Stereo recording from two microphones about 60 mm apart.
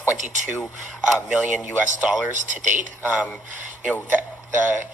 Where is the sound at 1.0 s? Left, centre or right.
Centre.